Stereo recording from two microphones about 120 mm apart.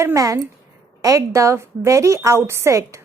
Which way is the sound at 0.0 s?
25° right (ahead or behind).